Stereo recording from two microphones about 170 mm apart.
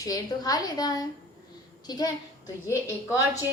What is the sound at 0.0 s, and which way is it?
A woman's voice, 20° left (ahead or behind).